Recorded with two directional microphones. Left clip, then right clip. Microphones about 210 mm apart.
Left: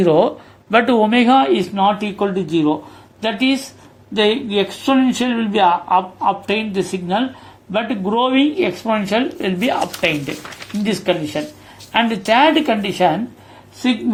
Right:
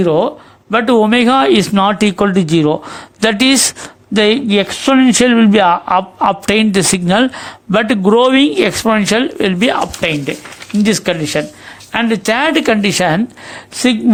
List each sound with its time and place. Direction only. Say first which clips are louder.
0.0 s speech: right 1 dB; 15° right (ahead or behind)
0.9 s speech: right 6 dB; 30° right (ahead or behind)